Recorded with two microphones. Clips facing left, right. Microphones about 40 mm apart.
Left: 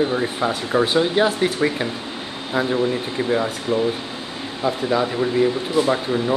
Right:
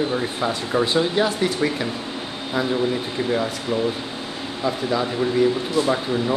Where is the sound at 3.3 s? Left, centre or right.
Centre.